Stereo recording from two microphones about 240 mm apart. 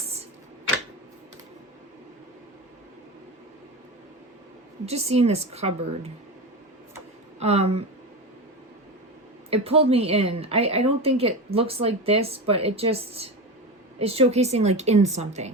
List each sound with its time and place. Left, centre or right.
4.9 s a woman's voice: right
7.3 s a woman's voice: right
9.5 s a woman's voice: right